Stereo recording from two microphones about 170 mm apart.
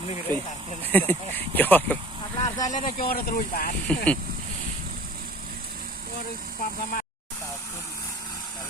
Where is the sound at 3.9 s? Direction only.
5° left (ahead or behind).